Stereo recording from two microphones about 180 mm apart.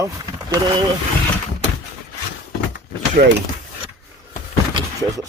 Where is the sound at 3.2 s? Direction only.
60° right (ahead or behind).